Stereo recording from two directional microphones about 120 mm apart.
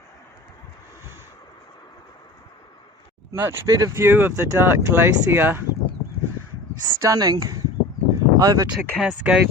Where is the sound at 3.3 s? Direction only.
20° right (ahead or behind).